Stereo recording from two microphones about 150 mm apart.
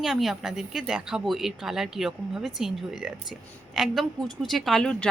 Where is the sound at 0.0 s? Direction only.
Centre (ahead or behind).